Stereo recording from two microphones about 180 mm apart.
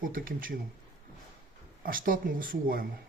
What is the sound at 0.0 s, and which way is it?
Speech, 50° right (ahead or behind).